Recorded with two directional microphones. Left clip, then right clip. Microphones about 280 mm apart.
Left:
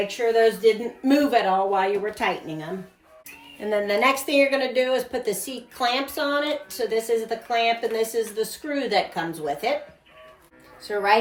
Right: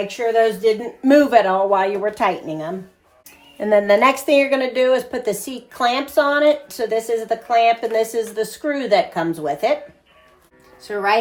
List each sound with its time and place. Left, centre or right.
0.3 s a woman's voice: right
10.8 s a woman's voice: centre